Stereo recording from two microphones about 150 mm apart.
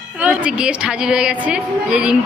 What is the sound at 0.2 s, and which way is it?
A woman's voice, 10° right (ahead or behind).